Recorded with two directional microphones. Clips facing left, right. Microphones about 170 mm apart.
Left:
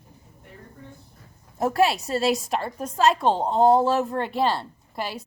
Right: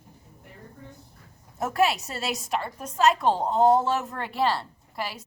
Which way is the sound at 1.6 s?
30° left (ahead or behind).